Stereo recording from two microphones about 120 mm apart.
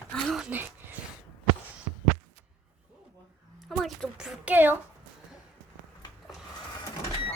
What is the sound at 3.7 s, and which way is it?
A woman's voice, centre (ahead or behind).